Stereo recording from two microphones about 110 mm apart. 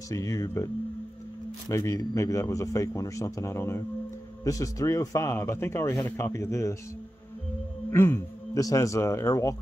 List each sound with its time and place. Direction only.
0.1 s speech: 30° left (ahead or behind)
1.7 s speech: 25° left (ahead or behind)
7.9 s speech: 25° left (ahead or behind)